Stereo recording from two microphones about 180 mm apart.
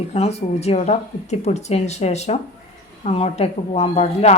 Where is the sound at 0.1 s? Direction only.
35° left (ahead or behind).